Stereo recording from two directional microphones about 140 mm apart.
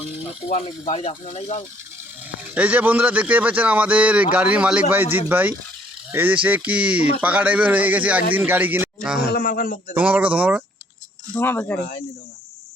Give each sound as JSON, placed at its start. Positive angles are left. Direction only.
{"t": 0.6, "sound": "speech", "side_deg": 45}
{"t": 2.4, "sound": "speech", "side_deg": -10}
{"t": 9.3, "sound": "a man's voice", "side_deg": 85}
{"t": 9.9, "sound": "speech", "side_deg": -10}
{"t": 11.3, "sound": "speech", "side_deg": 15}